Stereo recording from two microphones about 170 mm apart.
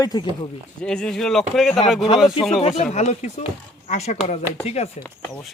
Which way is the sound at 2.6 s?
40° left (ahead or behind).